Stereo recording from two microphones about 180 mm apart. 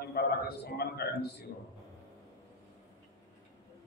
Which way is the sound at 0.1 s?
60° left (ahead or behind).